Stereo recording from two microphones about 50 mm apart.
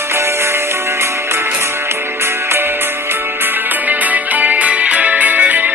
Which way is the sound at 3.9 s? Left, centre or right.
Right.